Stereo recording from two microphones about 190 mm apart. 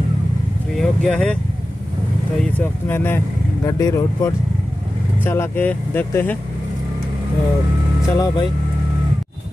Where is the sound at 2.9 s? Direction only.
10° left (ahead or behind).